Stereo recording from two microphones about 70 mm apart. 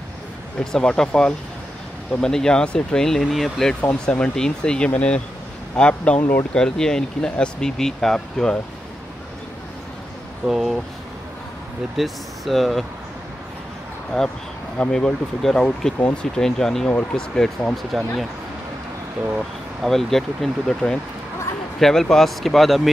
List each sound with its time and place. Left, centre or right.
0.7 s speech: centre
3.9 s speech: centre
10.4 s speech: centre
12.0 s speech: centre
14.1 s speech: centre
19.8 s speech: centre